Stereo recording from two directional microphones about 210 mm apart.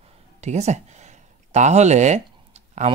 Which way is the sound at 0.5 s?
30° right (ahead or behind).